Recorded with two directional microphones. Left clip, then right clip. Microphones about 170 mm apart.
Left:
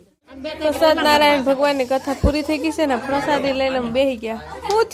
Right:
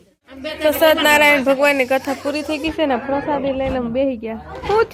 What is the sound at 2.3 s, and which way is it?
A woman's voice, 20° left (ahead or behind).